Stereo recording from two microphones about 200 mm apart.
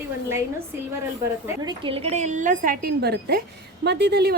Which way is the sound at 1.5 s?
20° right (ahead or behind).